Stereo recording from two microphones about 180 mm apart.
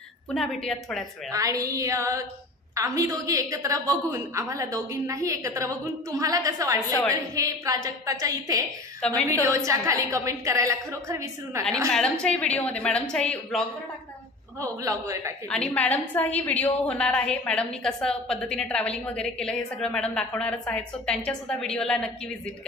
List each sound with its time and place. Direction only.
0.3 s a woman's voice: centre (ahead or behind)
1.3 s a woman's voice: 20° right (ahead or behind)
9.0 s a woman's voice: 5° left (ahead or behind)
9.4 s a woman's voice: 15° right (ahead or behind)
11.9 s a woman's voice: 5° left (ahead or behind)
14.6 s a woman's voice: 20° right (ahead or behind)
15.5 s a woman's voice: 5° left (ahead or behind)